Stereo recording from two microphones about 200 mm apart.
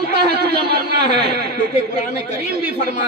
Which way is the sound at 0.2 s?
55° right (ahead or behind).